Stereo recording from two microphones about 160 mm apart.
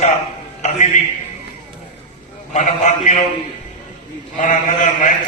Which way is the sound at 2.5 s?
45° left (ahead or behind).